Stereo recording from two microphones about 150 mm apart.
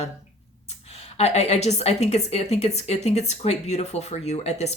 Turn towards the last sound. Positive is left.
turn(degrees=45)  # may be behind; listen again after turning